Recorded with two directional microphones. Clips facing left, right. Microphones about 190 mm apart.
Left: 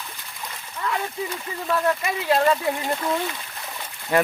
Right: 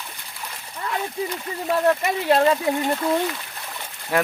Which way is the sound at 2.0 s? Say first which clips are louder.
Right 2 dB; 30° right (ahead or behind).